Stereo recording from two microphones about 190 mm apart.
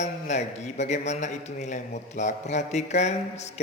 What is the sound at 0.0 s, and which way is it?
A man's voice, 35° left (ahead or behind).